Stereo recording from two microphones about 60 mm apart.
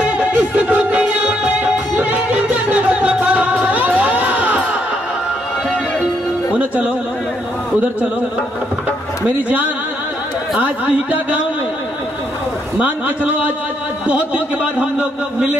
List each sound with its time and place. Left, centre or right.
0.0 s music: right
6.5 s music: right
10.6 s a man's voice: right
12.7 s a man's voice: right